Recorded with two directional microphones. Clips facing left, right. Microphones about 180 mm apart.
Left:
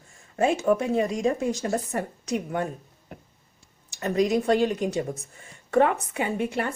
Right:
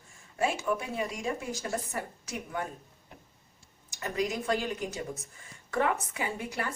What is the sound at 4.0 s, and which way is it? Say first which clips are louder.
Speech: left 9 dB; 35° left (ahead or behind).